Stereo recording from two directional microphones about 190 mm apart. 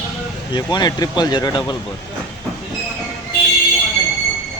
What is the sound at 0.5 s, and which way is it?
Speech, 20° left (ahead or behind).